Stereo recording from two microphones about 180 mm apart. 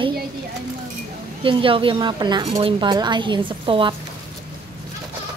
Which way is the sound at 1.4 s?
30° right (ahead or behind).